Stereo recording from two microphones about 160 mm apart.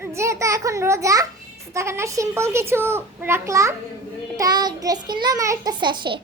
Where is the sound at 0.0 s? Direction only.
15° right (ahead or behind).